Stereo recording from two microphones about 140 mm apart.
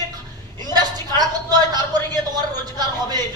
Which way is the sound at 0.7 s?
30° right (ahead or behind).